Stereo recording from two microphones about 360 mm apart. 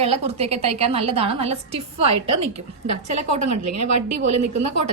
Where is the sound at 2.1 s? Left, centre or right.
Right.